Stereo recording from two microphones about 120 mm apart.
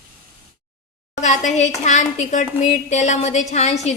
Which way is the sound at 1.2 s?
85° left.